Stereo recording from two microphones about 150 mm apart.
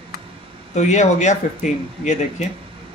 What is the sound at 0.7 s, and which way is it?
Speech, 50° left (ahead or behind).